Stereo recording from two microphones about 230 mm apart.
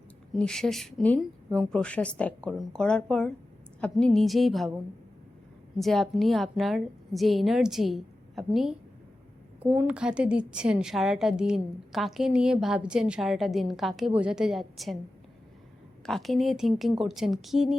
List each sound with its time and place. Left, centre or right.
0.3 s a woman's voice: centre
5.8 s a woman's voice: centre
16.0 s a woman's voice: centre